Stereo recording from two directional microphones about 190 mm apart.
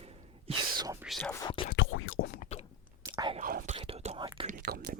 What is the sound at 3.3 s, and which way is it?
Whispering, 45° right (ahead or behind).